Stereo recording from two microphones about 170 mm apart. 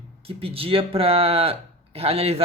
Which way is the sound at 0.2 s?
35° right (ahead or behind).